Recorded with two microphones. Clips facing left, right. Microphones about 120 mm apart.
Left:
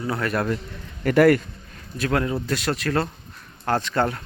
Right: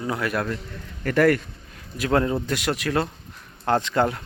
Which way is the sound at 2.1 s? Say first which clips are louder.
Right 3 dB; 25° right (ahead or behind).